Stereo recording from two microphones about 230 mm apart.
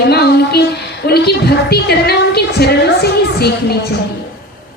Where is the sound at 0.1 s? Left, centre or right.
Left.